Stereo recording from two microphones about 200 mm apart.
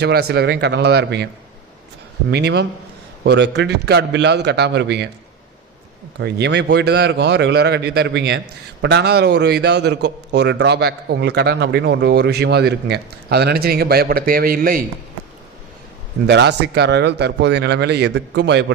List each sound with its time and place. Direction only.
0.0 s a man's voice: 55° right (ahead or behind)
2.3 s a man's voice: 55° right (ahead or behind)
6.1 s a man's voice: 60° right (ahead or behind)
16.2 s a man's voice: 60° right (ahead or behind)